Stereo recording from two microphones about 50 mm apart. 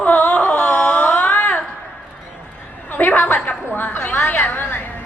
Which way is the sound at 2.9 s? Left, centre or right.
Left.